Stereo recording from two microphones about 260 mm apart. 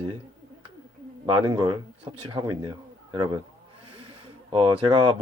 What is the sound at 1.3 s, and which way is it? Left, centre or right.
Speech, centre.